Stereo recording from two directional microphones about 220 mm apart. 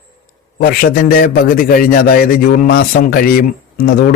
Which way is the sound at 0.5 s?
40° left (ahead or behind).